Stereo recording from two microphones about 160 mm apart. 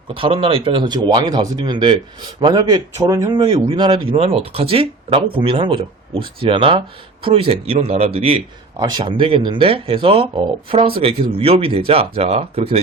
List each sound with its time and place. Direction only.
0.2 s speech: 35° right (ahead or behind)